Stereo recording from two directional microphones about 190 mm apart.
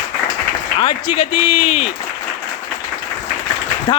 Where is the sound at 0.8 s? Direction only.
30° left (ahead or behind).